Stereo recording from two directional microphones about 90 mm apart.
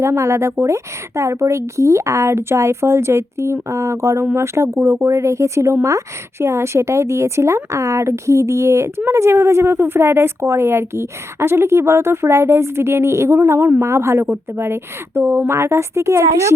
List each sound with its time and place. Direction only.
0.0 s a woman's voice: 30° right (ahead or behind)